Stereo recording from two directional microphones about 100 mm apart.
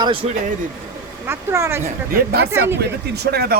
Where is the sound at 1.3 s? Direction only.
25° right (ahead or behind).